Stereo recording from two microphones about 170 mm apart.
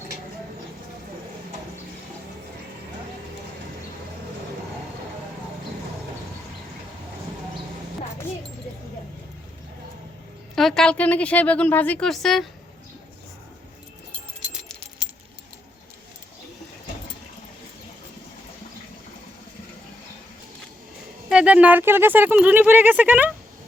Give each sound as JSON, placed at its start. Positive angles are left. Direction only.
{"t": 10.5, "sound": "speech", "side_deg": 0}
{"t": 14.5, "sound": "keys jangling", "side_deg": 0}
{"t": 21.2, "sound": "speech", "side_deg": -5}